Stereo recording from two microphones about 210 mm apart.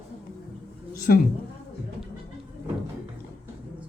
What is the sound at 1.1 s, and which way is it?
Speech, 50° left (ahead or behind).